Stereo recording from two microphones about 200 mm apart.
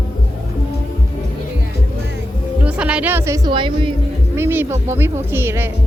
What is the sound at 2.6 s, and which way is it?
Music, 5° right (ahead or behind).